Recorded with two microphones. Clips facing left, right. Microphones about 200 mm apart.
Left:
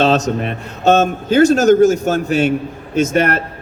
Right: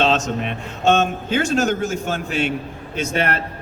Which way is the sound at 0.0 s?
40° left (ahead or behind).